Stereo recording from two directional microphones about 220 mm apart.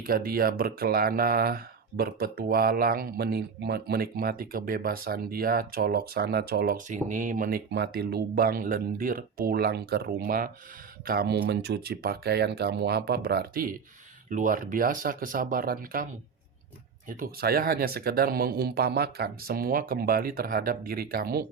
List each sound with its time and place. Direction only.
0.0 s speech: 40° right (ahead or behind)
7.7 s speech: 50° right (ahead or behind)
17.1 s speech: 40° right (ahead or behind)